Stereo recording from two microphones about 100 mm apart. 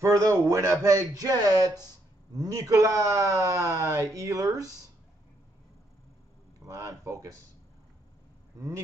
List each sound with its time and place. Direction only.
0.0 s a man's voice: 30° right (ahead or behind)
6.6 s a man's voice: 35° right (ahead or behind)
8.5 s a man's voice: 30° right (ahead or behind)